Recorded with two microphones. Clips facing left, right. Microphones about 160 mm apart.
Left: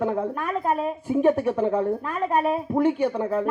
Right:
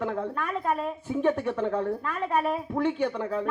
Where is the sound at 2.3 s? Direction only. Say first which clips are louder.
Left 5 dB; centre (ahead or behind).